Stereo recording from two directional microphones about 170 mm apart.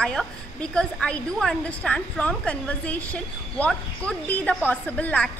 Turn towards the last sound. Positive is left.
turn(degrees=5)  # may be behind; listen again after turning